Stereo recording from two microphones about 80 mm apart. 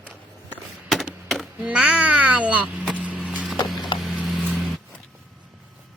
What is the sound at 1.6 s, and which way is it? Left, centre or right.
Babbling, centre.